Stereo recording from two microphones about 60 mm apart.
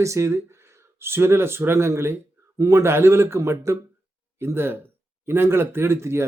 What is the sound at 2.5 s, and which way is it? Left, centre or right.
Speech, right.